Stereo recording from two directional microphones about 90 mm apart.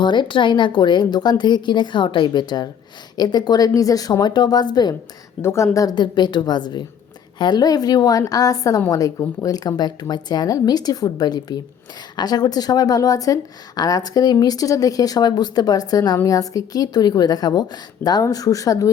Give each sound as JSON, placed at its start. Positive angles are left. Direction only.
{"t": 0.0, "sound": "a woman's voice", "side_deg": 60}
{"t": 5.4, "sound": "a woman's voice", "side_deg": 30}
{"t": 5.7, "sound": "a woman's voice", "side_deg": 40}
{"t": 6.0, "sound": "a woman's voice", "side_deg": 55}